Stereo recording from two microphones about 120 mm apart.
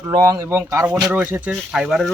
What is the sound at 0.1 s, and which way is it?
Speech, 30° right (ahead or behind).